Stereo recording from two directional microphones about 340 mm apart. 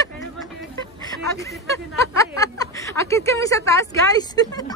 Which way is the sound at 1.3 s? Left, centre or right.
Centre.